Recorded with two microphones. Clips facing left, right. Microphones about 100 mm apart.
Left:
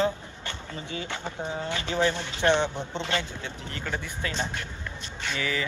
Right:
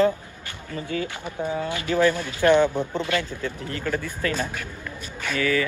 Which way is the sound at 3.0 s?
25° left (ahead or behind).